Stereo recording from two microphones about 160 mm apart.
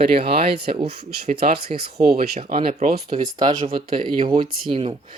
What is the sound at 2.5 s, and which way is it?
Speech, 55° right (ahead or behind).